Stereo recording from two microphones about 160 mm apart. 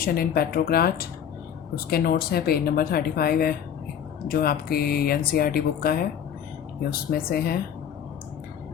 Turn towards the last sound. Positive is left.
turn(degrees=70)  # may be behind; listen again after turning